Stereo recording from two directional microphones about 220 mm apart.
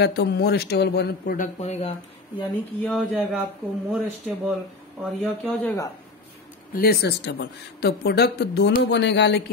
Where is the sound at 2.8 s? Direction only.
5° left (ahead or behind).